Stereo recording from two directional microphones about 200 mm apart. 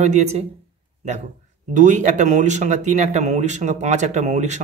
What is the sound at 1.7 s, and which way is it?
A man's voice, 40° right (ahead or behind).